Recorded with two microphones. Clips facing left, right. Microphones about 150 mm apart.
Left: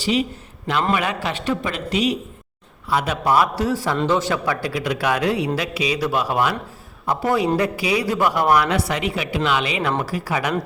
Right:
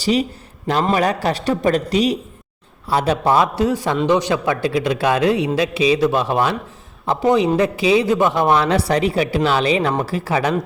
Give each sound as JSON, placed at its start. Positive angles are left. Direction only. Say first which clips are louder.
{"t": 0.0, "sound": "a man's voice", "louder": "right 3 dB", "side_deg": -40}